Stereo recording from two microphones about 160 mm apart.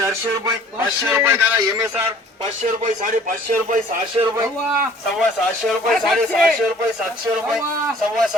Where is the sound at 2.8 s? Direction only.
55° right (ahead or behind).